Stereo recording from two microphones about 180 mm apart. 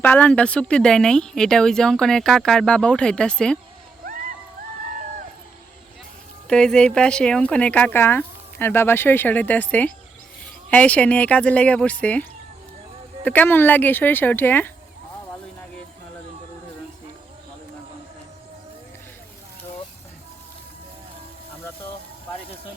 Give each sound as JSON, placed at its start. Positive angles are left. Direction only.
{"t": 0.0, "sound": "speech", "side_deg": 10}
{"t": 6.5, "sound": "speech", "side_deg": 5}
{"t": 13.2, "sound": "speech", "side_deg": 10}